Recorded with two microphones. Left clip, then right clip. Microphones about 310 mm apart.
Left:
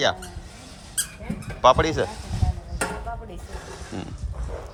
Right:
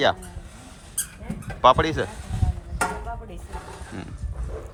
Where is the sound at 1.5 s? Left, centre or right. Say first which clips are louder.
Even; centre.